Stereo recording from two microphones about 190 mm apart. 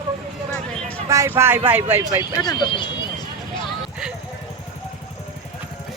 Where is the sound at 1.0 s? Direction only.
15° right (ahead or behind).